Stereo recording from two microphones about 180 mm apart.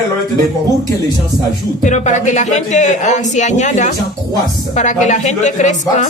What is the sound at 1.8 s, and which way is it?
A woman's voice, 40° left (ahead or behind).